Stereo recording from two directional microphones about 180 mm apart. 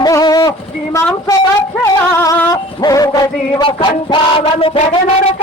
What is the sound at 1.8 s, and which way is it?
Music, 15° left (ahead or behind).